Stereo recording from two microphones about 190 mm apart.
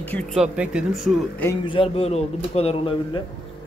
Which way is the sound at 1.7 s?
30° left (ahead or behind).